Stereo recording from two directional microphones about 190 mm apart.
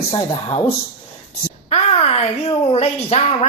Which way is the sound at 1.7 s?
35° left (ahead or behind).